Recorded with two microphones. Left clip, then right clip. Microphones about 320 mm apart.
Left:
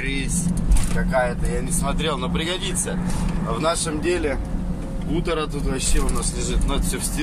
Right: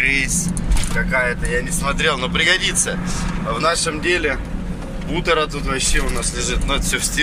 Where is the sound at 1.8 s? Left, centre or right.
Centre.